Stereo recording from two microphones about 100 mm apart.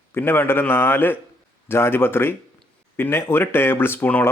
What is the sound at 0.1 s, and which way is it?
A man's voice, 20° left (ahead or behind).